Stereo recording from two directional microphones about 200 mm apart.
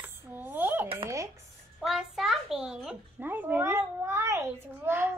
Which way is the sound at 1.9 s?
Centre (ahead or behind).